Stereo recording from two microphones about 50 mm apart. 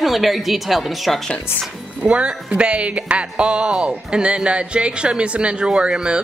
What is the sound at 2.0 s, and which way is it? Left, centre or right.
Speech, right.